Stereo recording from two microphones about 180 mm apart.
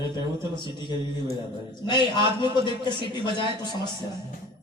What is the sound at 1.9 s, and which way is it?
Speech, 25° left (ahead or behind).